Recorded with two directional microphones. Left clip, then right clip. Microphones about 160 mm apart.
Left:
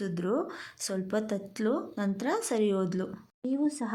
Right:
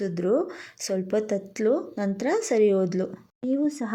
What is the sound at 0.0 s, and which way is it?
Speech, 15° right (ahead or behind).